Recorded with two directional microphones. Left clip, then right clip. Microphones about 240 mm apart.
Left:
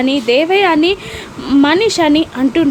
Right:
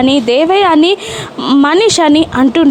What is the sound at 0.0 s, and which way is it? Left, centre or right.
Speech, centre.